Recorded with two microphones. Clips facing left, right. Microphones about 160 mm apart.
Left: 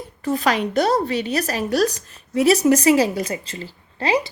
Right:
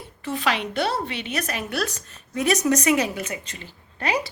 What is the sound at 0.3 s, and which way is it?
A woman's voice, 40° left (ahead or behind).